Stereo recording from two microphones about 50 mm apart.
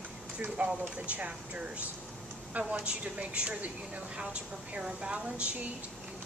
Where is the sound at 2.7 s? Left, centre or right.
Right.